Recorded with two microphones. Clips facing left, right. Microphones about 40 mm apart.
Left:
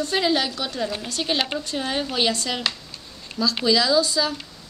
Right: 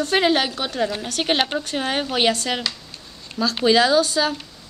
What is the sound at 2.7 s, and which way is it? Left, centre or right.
Speech, left.